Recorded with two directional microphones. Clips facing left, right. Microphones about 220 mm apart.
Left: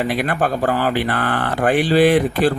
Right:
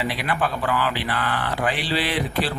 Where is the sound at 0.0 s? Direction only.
50° left (ahead or behind).